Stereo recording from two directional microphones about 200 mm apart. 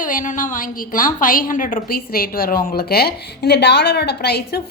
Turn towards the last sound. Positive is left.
turn(degrees=55)  # may be behind; listen again after turning